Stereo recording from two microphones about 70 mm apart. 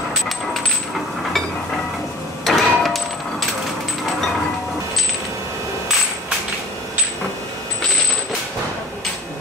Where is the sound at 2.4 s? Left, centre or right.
Centre.